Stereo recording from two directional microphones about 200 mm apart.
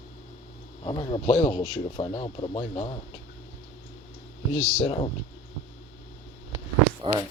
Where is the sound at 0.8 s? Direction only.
25° left (ahead or behind).